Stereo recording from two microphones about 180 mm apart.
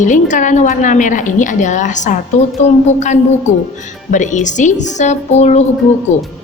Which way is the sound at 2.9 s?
40° left (ahead or behind).